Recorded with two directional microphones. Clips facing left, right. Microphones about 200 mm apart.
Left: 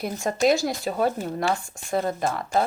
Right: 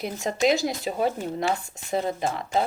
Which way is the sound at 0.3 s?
50° left (ahead or behind).